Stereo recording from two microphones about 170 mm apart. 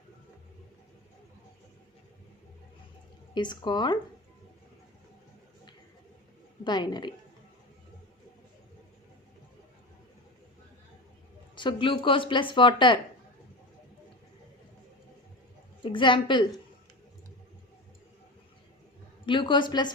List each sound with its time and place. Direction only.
3.3 s speech: 25° left (ahead or behind)
6.7 s speech: 25° left (ahead or behind)
11.5 s speech: 30° left (ahead or behind)
15.8 s a woman's voice: 30° left (ahead or behind)
19.2 s speech: 30° left (ahead or behind)